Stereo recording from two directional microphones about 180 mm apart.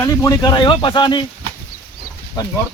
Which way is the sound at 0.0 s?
20° left (ahead or behind).